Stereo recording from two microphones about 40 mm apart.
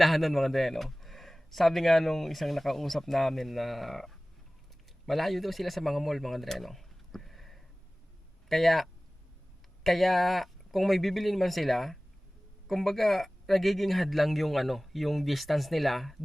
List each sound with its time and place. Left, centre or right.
0.0 s speech: centre
6.5 s a sound: centre
8.4 s speech: centre